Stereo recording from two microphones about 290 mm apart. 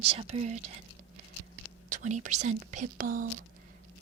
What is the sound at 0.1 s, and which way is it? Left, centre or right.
Speech, right.